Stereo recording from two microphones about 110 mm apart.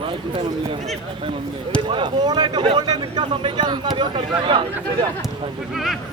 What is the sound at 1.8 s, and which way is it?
Speech, 45° right (ahead or behind).